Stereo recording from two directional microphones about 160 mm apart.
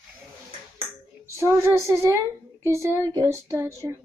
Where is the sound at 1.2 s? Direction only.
20° right (ahead or behind).